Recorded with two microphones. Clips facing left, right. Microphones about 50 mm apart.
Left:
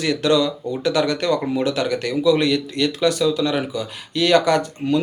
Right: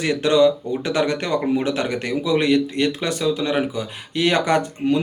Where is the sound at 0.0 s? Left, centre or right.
Right.